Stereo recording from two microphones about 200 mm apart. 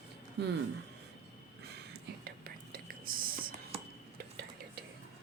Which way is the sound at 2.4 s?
45° right (ahead or behind).